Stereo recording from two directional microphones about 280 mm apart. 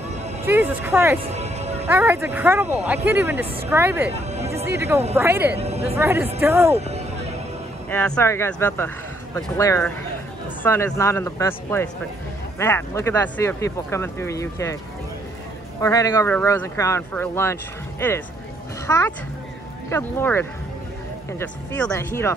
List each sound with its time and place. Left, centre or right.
0.5 s speech: centre
1.2 s music: right
1.9 s speech: centre
4.1 s speech: right
4.7 s speech: centre
5.6 s speech: right
5.9 s speech: centre
6.7 s music: right
7.9 s speech: centre
15.8 s speech: centre
18.9 s speech: centre